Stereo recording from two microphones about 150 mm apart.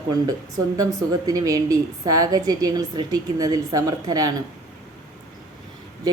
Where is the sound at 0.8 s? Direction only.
25° right (ahead or behind).